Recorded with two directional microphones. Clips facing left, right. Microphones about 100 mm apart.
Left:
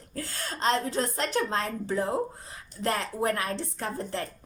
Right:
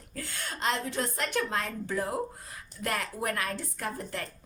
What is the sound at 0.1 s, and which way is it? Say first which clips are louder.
A woman's voice: left 3 dB; 35° left (ahead or behind).